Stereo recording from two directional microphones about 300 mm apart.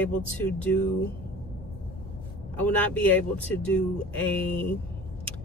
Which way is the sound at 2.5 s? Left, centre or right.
Centre.